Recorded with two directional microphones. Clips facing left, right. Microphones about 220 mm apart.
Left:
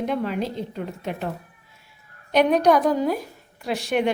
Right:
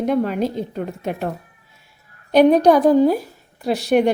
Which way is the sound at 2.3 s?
35° right (ahead or behind).